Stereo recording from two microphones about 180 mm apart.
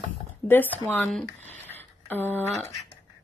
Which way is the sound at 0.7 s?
10° left (ahead or behind).